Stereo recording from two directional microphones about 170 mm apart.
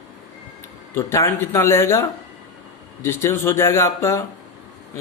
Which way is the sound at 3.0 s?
15° left (ahead or behind).